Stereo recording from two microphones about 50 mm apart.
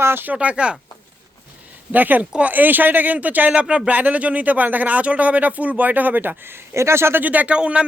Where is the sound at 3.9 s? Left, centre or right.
Right.